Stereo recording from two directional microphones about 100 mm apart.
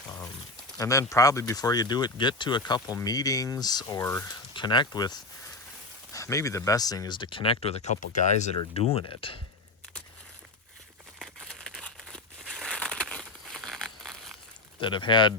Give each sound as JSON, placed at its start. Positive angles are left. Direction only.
{"t": 0.8, "sound": "speech", "side_deg": 35}
{"t": 4.3, "sound": "speech", "side_deg": 50}
{"t": 6.1, "sound": "speech", "side_deg": 35}
{"t": 7.2, "sound": "speech", "side_deg": 60}
{"t": 11.2, "sound": "crumpling", "side_deg": 5}
{"t": 14.8, "sound": "speech", "side_deg": 55}